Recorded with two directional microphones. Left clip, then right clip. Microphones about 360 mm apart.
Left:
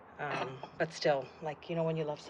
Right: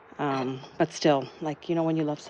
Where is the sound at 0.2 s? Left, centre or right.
Centre.